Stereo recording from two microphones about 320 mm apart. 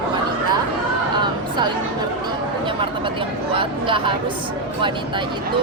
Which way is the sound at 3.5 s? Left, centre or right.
Centre.